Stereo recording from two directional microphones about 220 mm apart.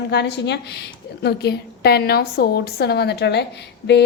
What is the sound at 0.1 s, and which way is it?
A woman's voice, 50° left (ahead or behind).